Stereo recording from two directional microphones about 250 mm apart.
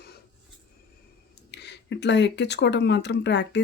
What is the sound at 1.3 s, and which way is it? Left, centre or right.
Speech, left.